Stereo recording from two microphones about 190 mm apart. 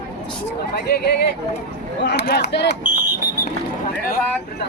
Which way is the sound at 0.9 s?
60° left (ahead or behind).